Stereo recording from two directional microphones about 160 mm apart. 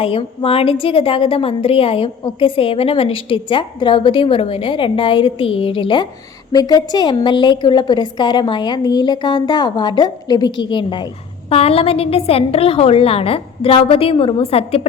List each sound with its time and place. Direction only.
0.0 s a woman's voice: 35° left (ahead or behind)